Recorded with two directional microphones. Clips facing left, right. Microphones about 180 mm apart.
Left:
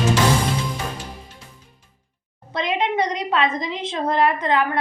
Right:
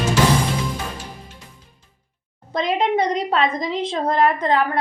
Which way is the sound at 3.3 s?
40° right (ahead or behind).